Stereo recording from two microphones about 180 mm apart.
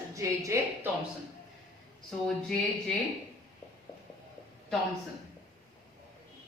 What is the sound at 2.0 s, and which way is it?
Speech, centre (ahead or behind).